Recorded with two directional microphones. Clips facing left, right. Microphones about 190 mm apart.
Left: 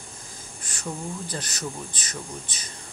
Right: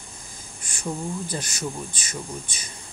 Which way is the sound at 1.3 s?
10° right (ahead or behind).